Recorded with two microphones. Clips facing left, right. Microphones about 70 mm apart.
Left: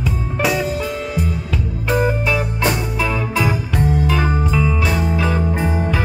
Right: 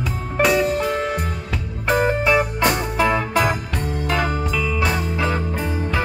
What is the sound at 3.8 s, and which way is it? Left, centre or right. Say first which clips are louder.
Music: left 6 dB; centre.